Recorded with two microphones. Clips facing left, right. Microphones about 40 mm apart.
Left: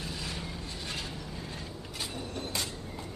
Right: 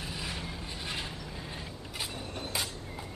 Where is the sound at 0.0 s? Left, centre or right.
Centre.